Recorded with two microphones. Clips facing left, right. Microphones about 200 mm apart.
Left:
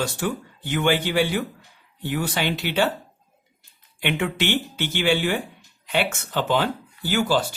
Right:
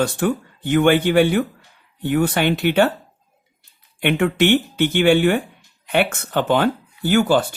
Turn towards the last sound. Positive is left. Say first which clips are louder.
# right 6 dB
turn(degrees=-55)  # may be behind; listen again after turning